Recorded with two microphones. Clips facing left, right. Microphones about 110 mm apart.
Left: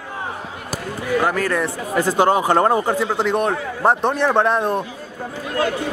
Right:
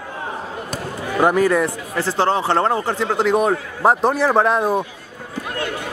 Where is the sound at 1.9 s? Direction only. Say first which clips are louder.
Left 3 dB; 15° left (ahead or behind); by 4.8 s 5° right (ahead or behind).